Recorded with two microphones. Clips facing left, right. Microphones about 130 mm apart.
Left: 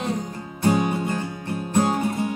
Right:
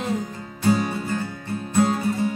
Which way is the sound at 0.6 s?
20° left (ahead or behind).